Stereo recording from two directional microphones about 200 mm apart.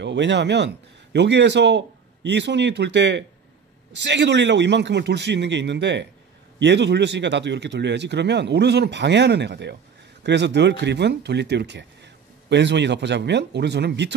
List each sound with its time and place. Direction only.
0.0 s speech: 65° right (ahead or behind)